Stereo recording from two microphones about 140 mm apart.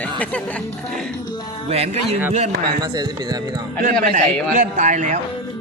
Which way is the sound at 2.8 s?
30° right (ahead or behind).